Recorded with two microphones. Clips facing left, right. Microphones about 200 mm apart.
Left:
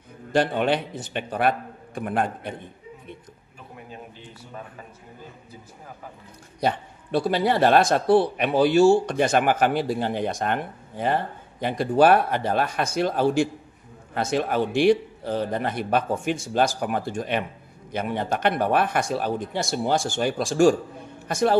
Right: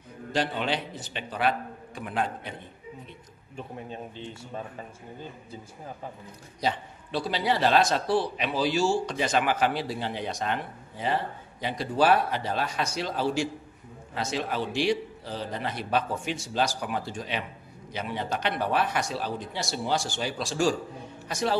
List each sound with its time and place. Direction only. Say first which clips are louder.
0.3 s a man's voice: left 7 dB; 55° left (ahead or behind)
3.5 s a man's voice: right 4 dB; 25° right (ahead or behind)
6.6 s a man's voice: left 4 dB; 55° left (ahead or behind)